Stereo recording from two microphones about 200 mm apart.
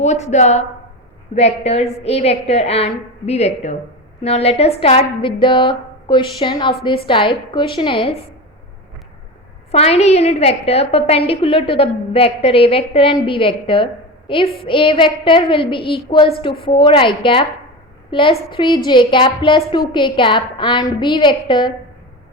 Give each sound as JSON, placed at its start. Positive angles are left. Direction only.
{"t": 0.0, "sound": "a woman's voice", "side_deg": 35}
{"t": 9.7, "sound": "a woman's voice", "side_deg": 30}